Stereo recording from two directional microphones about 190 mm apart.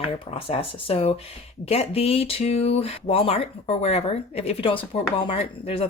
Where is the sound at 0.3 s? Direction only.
30° left (ahead or behind).